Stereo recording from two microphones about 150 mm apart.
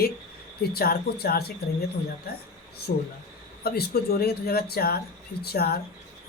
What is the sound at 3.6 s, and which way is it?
Speech, 90° left.